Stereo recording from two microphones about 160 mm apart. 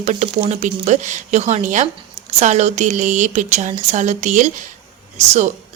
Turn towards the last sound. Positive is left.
turn(degrees=-45)  # may be behind; listen again after turning